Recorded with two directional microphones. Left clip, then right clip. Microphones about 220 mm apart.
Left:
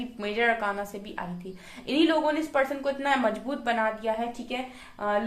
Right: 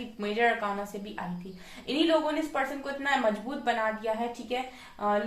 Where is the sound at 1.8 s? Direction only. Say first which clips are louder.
Left 2 dB; 50° left (ahead or behind).